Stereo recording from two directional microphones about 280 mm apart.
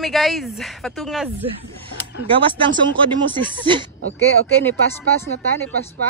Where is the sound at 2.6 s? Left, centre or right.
Centre.